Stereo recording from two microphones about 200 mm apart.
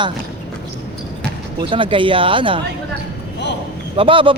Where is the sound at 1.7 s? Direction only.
25° right (ahead or behind).